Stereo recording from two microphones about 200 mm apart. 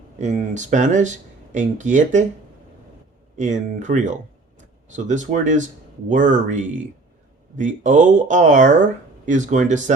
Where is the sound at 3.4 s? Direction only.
35° right (ahead or behind).